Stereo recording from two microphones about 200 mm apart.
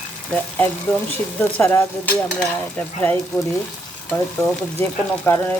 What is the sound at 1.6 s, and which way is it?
Stir, 10° left (ahead or behind).